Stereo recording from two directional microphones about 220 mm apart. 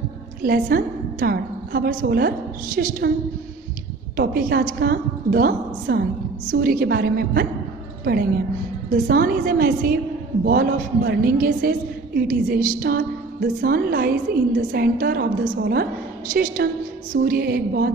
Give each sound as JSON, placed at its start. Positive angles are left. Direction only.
{"t": 0.4, "sound": "a woman's voice", "side_deg": -40}
{"t": 4.2, "sound": "a woman's voice", "side_deg": -45}